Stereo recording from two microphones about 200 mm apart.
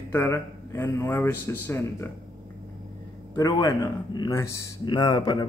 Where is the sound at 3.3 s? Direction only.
20° left (ahead or behind).